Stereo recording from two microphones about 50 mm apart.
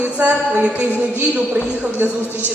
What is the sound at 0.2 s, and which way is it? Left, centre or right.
Speech, right.